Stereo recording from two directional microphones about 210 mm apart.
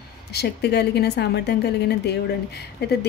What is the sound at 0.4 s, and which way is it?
A woman's voice, 50° left (ahead or behind).